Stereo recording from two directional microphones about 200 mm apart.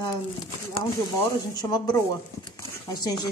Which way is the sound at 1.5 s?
20° left (ahead or behind).